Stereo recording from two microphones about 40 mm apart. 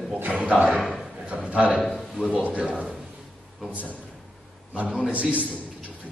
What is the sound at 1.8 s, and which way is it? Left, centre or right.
Speech, centre.